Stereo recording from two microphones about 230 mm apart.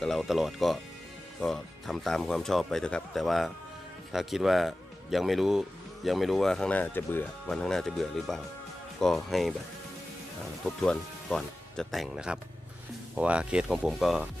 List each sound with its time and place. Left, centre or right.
0.0 s speech: centre
10.8 s speech: centre